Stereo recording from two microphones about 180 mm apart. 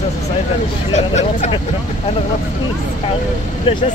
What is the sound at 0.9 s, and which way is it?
Speech, 40° left (ahead or behind).